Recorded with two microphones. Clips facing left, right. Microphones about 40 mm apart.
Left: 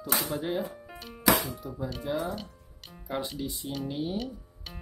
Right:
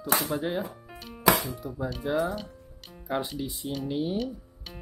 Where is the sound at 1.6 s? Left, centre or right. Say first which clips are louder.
Right 3 dB; centre.